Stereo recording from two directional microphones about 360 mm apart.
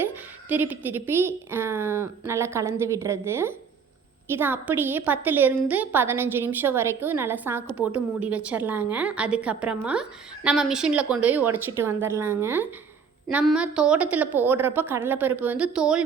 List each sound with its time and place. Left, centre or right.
0.0 s a woman's voice: centre